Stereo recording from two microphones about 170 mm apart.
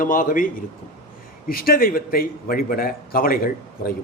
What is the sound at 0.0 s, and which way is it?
A man's voice, 50° left (ahead or behind).